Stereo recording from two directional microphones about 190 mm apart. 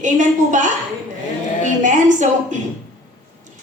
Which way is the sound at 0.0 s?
40° right (ahead or behind).